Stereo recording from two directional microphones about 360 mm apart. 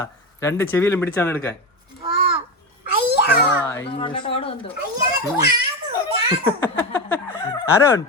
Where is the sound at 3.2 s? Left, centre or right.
Left.